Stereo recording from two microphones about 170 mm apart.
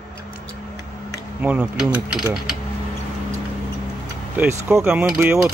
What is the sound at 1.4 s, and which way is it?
Speech, 5° right (ahead or behind).